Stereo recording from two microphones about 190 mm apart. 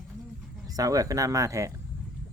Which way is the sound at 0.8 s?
20° right (ahead or behind).